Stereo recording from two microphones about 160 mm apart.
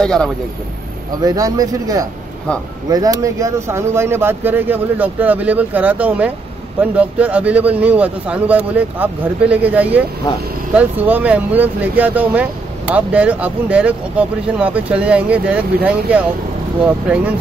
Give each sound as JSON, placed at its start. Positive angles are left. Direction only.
{"t": 0.0, "sound": "speech", "side_deg": 5}
{"t": 1.2, "sound": "a man's voice", "side_deg": -25}